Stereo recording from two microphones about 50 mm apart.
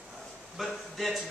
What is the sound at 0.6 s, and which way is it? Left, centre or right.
Speech, centre.